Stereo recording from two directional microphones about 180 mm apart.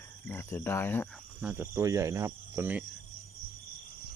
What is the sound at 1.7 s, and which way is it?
Speech, 15° right (ahead or behind).